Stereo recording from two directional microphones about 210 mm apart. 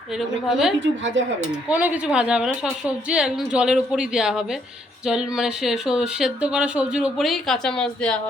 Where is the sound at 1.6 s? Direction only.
5° right (ahead or behind).